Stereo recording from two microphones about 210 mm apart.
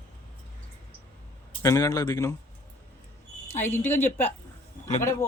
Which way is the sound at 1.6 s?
15° left (ahead or behind).